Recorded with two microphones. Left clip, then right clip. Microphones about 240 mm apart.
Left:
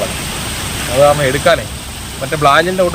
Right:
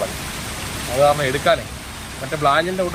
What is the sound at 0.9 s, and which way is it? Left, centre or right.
Speech, centre.